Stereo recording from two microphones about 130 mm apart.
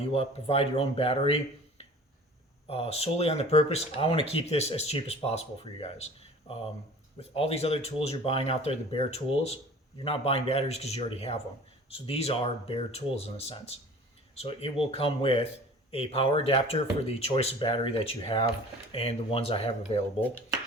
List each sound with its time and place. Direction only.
0.1 s speech: 50° left (ahead or behind)
2.6 s speech: 50° left (ahead or behind)
7.2 s speech: 50° left (ahead or behind)